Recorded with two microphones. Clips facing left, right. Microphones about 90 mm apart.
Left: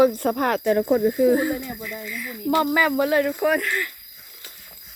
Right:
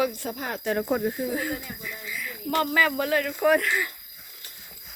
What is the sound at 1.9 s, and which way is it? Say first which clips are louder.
Speech: left 4 dB; 5° right (ahead or behind).